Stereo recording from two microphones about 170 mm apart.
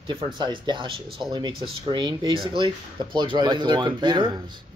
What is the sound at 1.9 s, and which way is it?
Speech, 25° right (ahead or behind).